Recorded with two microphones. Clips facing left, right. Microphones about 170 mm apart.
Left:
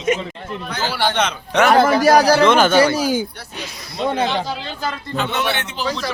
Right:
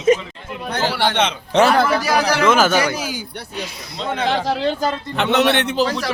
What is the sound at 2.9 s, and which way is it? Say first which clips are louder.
Speech: left 7 dB; 40° left (ahead or behind).